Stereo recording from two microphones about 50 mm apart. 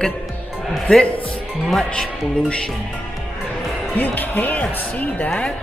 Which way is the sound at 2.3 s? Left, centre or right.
Left.